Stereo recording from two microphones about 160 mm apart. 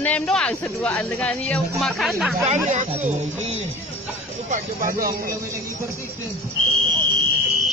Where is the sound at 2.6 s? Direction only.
50° right (ahead or behind); by 5.3 s 65° right (ahead or behind).